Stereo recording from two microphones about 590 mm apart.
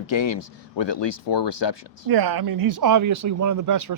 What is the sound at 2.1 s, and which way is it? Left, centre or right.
Speech, right.